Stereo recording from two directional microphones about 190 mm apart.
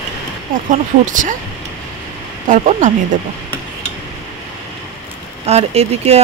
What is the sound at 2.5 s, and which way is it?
Speech, 40° right (ahead or behind).